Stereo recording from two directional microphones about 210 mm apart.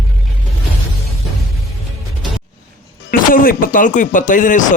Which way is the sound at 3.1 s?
40° left (ahead or behind).